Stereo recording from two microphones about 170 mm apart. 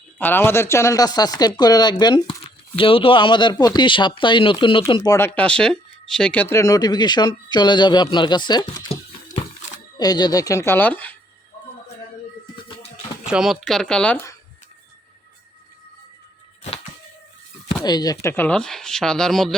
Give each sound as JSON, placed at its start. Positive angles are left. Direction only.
{"t": 0.2, "sound": "speech", "side_deg": 10}
{"t": 10.0, "sound": "speech", "side_deg": 25}
{"t": 12.6, "sound": "a sound", "side_deg": 30}
{"t": 13.3, "sound": "speech", "side_deg": 0}
{"t": 17.8, "sound": "speech", "side_deg": 25}